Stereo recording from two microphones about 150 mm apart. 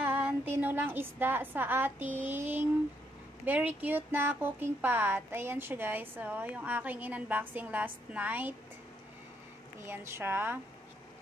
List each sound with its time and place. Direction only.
0.0 s speech: 10° right (ahead or behind)
9.8 s speech: 15° right (ahead or behind)